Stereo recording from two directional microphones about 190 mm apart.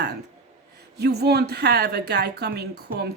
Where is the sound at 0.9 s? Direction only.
60° right (ahead or behind).